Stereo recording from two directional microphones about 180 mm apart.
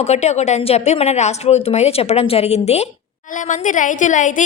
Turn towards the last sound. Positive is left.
turn(degrees=45)  # may be behind; listen again after turning